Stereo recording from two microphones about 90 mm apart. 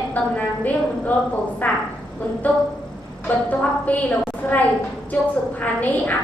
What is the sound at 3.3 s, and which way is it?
A woman's voice, 20° left (ahead or behind).